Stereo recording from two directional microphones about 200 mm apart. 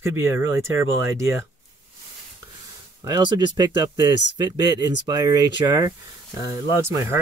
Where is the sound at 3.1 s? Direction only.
20° right (ahead or behind).